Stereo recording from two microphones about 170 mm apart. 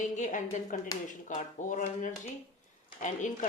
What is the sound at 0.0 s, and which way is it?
Speech, 50° left (ahead or behind).